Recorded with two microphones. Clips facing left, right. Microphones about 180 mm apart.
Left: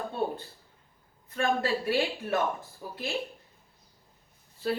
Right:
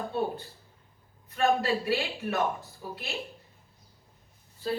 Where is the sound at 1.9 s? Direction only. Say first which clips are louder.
Left 2 dB; 50° left (ahead or behind).